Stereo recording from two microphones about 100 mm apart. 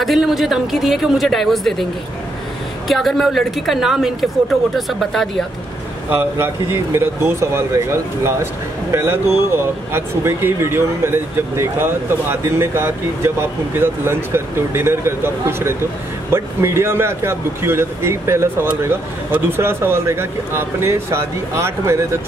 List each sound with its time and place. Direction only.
0.0 s a woman's voice: centre (ahead or behind)
2.9 s a woman's voice: centre (ahead or behind)
6.0 s a man's voice: 25° right (ahead or behind)
16.3 s a man's voice: 25° right (ahead or behind)